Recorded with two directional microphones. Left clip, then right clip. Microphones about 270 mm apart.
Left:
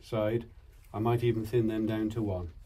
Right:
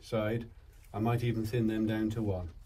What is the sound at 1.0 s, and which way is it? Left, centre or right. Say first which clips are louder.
Speech: left 4 dB; centre.